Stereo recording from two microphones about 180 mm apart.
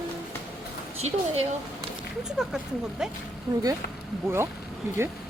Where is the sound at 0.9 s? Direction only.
35° right (ahead or behind).